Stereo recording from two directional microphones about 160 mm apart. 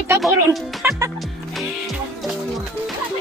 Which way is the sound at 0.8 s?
15° right (ahead or behind).